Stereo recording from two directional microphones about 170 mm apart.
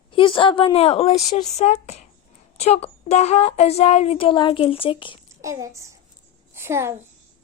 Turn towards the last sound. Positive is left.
turn(degrees=-15)  # may be behind; listen again after turning